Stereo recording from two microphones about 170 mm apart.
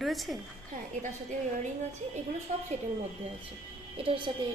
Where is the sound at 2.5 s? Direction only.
40° right (ahead or behind).